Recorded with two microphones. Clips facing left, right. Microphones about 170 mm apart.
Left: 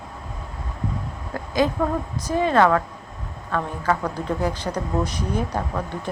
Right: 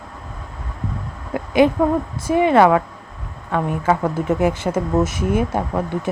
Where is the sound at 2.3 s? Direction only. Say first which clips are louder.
Right 5 dB; 15° right (ahead or behind).